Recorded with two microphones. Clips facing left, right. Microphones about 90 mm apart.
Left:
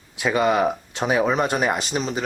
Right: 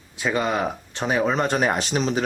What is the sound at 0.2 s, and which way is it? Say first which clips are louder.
Speech: left 4 dB; 15° left (ahead or behind).